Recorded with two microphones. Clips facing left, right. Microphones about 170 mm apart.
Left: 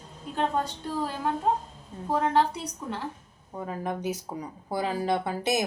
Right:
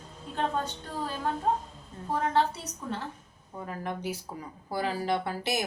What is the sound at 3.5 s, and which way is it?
A woman's voice, 20° left (ahead or behind).